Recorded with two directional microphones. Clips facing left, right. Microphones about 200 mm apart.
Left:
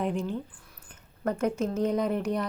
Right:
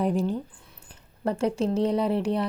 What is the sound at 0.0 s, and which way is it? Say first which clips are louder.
Speech: right 4 dB; 40° right (ahead or behind).